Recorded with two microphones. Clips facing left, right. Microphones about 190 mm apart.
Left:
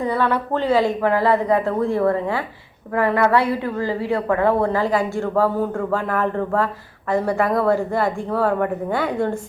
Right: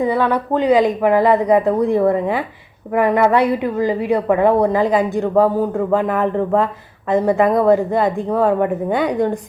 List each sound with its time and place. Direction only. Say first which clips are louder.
0.0 s a woman's voice: right 4 dB; 15° right (ahead or behind)